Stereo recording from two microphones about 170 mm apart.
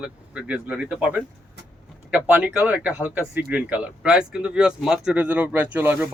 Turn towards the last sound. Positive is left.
turn(degrees=-10)  # may be behind; listen again after turning